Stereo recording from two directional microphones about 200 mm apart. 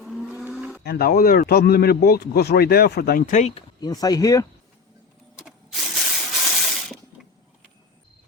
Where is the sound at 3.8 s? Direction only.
20° left (ahead or behind).